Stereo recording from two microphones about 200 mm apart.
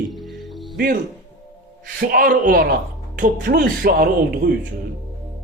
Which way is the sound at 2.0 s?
45° right (ahead or behind).